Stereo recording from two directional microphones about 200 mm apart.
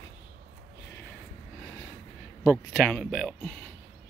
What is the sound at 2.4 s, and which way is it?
Speech, 5° left (ahead or behind).